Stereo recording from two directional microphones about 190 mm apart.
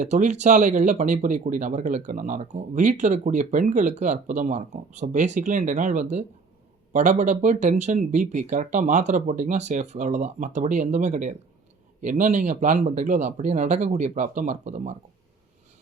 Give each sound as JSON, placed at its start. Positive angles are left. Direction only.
{"t": 0.0, "sound": "speech", "side_deg": -40}